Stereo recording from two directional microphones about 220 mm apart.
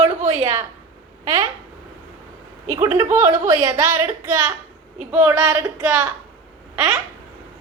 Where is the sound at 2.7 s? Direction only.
10° right (ahead or behind).